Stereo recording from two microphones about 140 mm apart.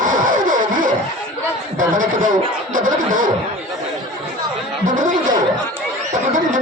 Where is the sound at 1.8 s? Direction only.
65° right (ahead or behind).